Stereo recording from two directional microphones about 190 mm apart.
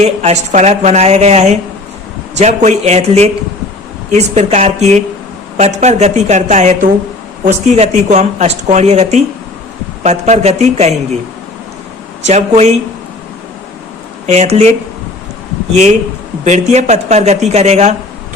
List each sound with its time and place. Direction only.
0.0 s speech: 35° right (ahead or behind)
12.2 s speech: 35° right (ahead or behind)
14.3 s speech: 35° right (ahead or behind)
15.7 s speech: 35° right (ahead or behind)